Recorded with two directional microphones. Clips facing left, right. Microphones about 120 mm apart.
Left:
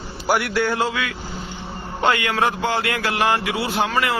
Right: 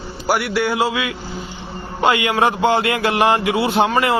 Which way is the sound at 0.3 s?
5° right (ahead or behind).